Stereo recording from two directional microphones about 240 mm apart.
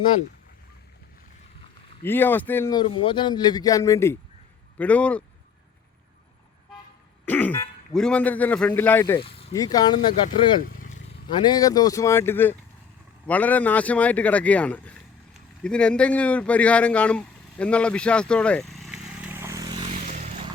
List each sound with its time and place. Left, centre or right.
2.0 s a man's voice: centre
7.3 s speech: centre
10.6 s vehicle: left
11.3 s a man's voice: centre; by 20.5 s right